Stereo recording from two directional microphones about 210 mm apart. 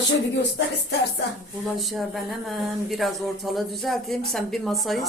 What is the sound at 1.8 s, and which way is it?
A woman's voice, centre (ahead or behind).